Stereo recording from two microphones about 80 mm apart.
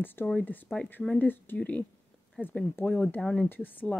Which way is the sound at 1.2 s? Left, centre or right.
Left.